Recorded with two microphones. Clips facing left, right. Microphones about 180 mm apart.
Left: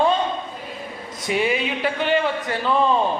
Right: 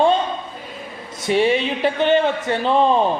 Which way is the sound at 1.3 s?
30° right (ahead or behind).